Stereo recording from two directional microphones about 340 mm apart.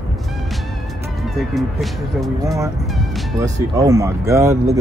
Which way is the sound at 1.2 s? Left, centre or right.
Centre.